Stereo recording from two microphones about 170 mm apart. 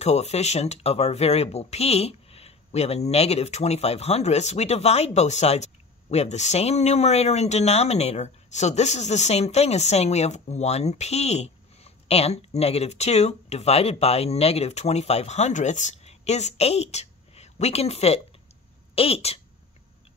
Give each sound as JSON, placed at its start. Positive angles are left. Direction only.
{"t": 0.0, "sound": "speech", "side_deg": 40}